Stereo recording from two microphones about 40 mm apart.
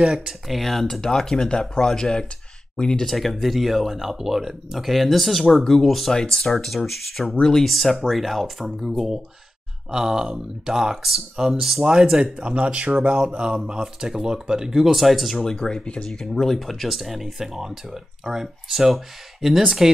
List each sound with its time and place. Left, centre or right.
0.0 s speech: centre
0.3 s speech: centre
1.0 s speech: centre
3.1 s speech: centre
6.1 s speech: centre
15.4 s speech: centre
15.8 s speech: left
16.1 s speech: centre